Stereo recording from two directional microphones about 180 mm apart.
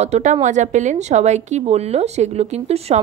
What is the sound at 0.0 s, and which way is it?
Speech, 40° right (ahead or behind).